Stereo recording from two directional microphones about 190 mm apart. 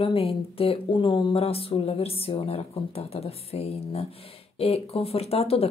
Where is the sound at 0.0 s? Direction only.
30° left (ahead or behind).